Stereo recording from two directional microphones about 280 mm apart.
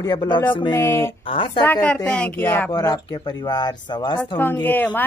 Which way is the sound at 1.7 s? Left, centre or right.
Centre.